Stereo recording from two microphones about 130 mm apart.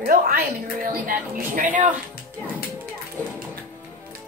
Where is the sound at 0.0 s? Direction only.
90° right.